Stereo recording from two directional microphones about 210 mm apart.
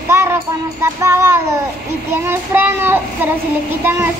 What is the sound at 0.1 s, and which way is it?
Child singing, 10° right (ahead or behind).